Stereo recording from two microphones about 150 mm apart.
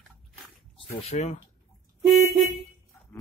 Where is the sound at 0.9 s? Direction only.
45° left (ahead or behind).